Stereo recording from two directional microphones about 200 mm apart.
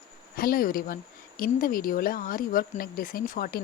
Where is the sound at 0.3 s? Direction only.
45° left (ahead or behind).